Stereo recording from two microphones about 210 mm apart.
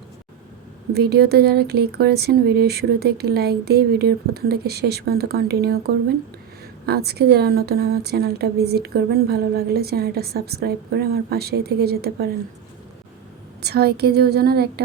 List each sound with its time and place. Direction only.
0.9 s a woman's voice: 50° right (ahead or behind)
13.6 s a woman's voice: 50° right (ahead or behind)